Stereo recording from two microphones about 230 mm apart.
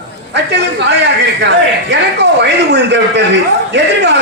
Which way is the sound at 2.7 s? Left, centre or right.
Right.